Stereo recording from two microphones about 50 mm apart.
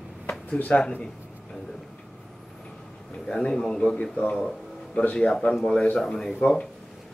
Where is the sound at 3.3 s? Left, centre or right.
Centre.